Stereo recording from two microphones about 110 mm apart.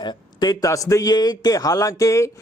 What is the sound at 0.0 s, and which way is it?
A man's voice, 40° left (ahead or behind).